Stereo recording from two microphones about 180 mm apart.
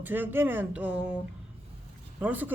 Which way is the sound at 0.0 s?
10° right (ahead or behind).